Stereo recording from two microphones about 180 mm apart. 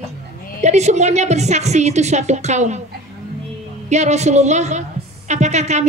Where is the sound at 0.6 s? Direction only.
40° right (ahead or behind).